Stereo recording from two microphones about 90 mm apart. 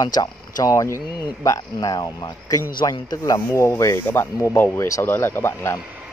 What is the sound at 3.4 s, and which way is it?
Speech, 30° left (ahead or behind).